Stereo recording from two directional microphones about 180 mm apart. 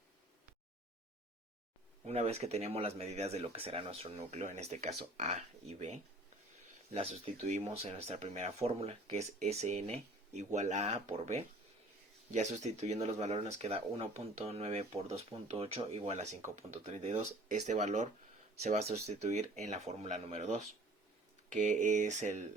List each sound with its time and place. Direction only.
2.0 s speech: 35° right (ahead or behind)